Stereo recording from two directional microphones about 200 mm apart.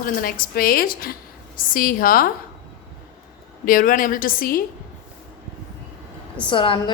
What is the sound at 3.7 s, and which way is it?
Speech, 45° left (ahead or behind).